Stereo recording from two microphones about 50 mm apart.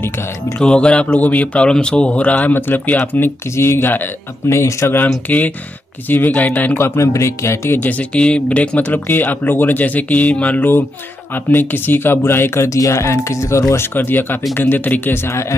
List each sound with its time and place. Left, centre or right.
0.6 s speech: centre
1.7 s speech: centre; by 3.0 s left
3.5 s speech: left
4.5 s speech: left
5.3 s speech: left
6.7 s speech: left
7.1 s speech: left
8.1 s speech: left
8.8 s speech: left
11.5 s speech: left
13.9 s speech: left